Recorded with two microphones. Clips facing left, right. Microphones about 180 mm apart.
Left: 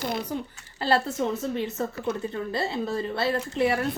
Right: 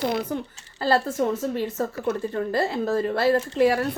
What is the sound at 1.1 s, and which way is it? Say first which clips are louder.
Speech: right 4 dB; 50° right (ahead or behind).